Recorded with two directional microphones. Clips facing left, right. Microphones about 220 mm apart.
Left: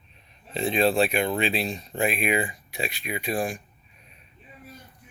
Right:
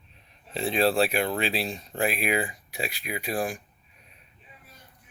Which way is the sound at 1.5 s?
5° right (ahead or behind).